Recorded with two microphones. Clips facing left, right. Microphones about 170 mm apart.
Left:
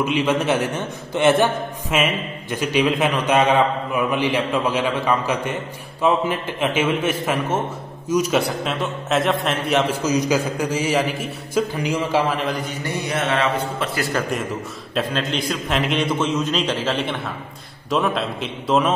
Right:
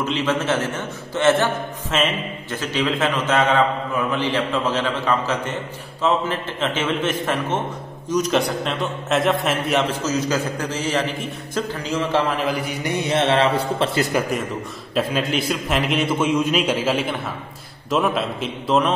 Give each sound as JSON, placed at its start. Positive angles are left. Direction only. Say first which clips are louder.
{"t": 0.0, "sound": "a man's voice", "louder": "left 2 dB", "side_deg": 15}
{"t": 9.8, "sound": "a man's voice", "louder": "left 2 dB", "side_deg": 15}
{"t": 12.4, "sound": "a man's voice", "louder": "right 2 dB", "side_deg": -10}
{"t": 12.9, "sound": "a man's voice", "louder": "right 4 dB", "side_deg": -25}
{"t": 15.0, "sound": "a man's voice", "louder": "right 2 dB", "side_deg": -5}